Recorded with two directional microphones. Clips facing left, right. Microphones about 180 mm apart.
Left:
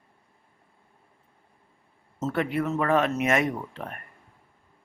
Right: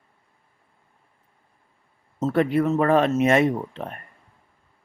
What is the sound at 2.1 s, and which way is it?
Speech, 35° right (ahead or behind).